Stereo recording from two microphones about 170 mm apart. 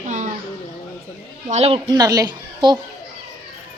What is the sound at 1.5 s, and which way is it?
A woman's voice, 35° right (ahead or behind).